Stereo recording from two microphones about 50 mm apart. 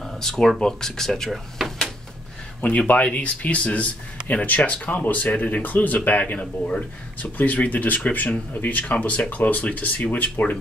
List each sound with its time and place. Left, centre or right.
0.0 s speech: centre
2.9 s speech: left